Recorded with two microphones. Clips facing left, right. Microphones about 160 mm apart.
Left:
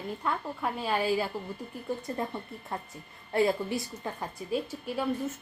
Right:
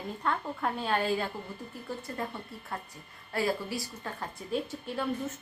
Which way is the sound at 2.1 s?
25° left (ahead or behind).